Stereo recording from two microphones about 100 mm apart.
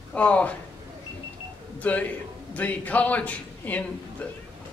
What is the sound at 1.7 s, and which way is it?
A man's voice, 15° left (ahead or behind).